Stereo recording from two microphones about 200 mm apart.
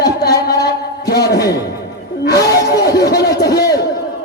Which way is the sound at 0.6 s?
50° left (ahead or behind).